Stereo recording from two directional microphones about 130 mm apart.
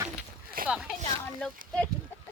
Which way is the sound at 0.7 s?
5° right (ahead or behind).